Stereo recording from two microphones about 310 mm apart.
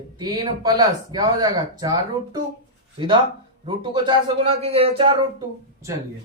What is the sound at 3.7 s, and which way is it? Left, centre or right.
Speech, centre.